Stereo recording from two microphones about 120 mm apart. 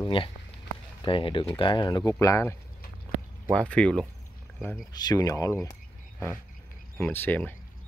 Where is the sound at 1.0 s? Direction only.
45° left (ahead or behind); by 2.5 s 25° left (ahead or behind).